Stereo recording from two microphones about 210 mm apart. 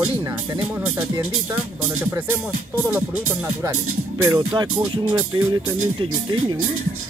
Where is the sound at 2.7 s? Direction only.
10° right (ahead or behind).